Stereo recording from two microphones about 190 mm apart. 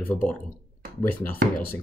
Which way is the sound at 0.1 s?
10° left (ahead or behind).